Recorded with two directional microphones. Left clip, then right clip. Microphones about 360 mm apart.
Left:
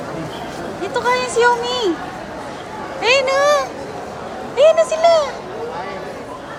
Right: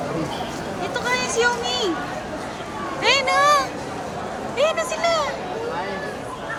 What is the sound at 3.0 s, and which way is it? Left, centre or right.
Speech, centre.